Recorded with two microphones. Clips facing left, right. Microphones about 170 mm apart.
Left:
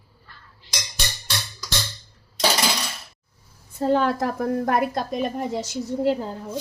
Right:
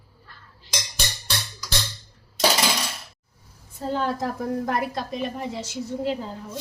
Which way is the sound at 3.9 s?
65° left (ahead or behind).